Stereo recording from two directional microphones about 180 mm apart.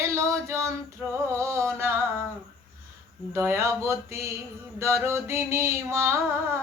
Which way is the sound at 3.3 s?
15° right (ahead or behind).